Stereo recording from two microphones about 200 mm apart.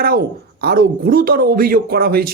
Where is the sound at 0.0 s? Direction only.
50° right (ahead or behind).